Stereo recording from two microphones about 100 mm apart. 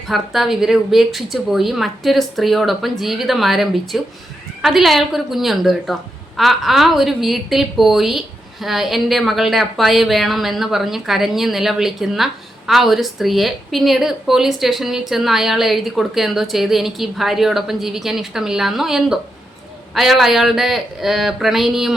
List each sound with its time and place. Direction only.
0.1 s a woman's voice: centre (ahead or behind)